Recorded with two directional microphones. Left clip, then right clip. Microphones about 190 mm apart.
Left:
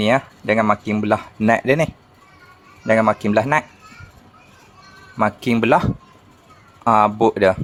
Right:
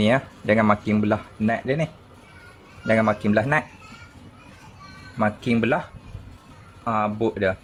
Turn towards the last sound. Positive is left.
turn(degrees=30)  # may be behind; listen again after turning